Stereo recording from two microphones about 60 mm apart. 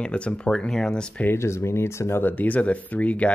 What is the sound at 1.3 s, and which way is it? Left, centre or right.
Speech, left.